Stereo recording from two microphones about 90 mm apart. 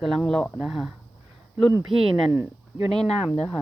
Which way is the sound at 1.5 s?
30° right (ahead or behind).